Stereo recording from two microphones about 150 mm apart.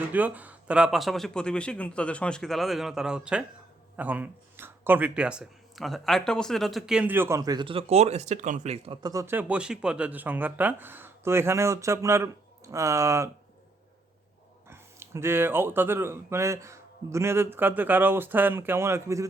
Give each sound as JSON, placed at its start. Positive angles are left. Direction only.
{"t": 0.1, "sound": "speech", "side_deg": -10}
{"t": 9.0, "sound": "speech", "side_deg": -25}
{"t": 14.7, "sound": "speech", "side_deg": -15}